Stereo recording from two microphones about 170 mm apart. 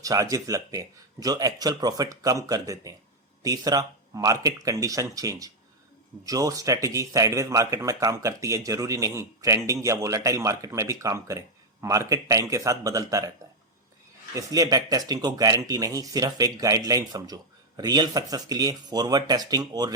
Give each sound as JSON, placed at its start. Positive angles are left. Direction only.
{"t": 0.0, "sound": "speech", "side_deg": -20}
{"t": 14.3, "sound": "speech", "side_deg": -20}